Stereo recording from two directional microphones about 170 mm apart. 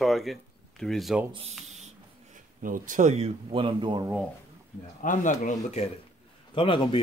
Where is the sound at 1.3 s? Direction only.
35° right (ahead or behind).